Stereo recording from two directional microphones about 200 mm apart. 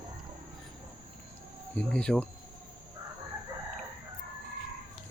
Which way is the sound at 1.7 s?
5° left (ahead or behind).